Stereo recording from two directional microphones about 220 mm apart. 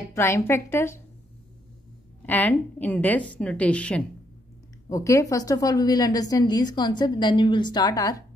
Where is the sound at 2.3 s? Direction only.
10° left (ahead or behind).